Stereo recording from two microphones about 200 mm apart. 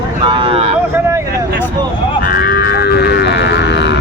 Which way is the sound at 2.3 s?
50° left (ahead or behind).